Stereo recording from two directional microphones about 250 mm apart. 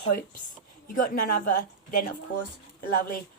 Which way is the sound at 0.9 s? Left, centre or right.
Left.